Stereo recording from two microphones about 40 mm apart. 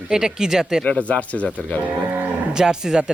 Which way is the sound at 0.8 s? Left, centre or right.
Left.